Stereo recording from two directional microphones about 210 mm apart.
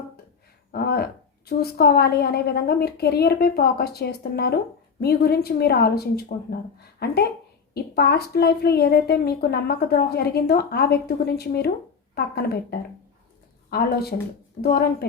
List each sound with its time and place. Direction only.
0.7 s a woman's voice: 50° left (ahead or behind)
13.7 s a woman's voice: 50° left (ahead or behind)